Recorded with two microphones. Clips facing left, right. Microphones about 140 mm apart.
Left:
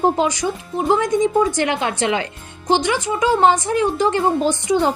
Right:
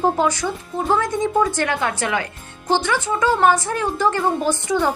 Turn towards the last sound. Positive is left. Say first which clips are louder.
# left 2 dB
turn(degrees=20)  # may be behind; listen again after turning